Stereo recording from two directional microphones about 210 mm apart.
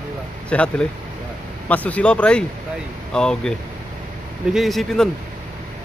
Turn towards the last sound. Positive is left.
turn(degrees=0)  # may be behind; listen again after turning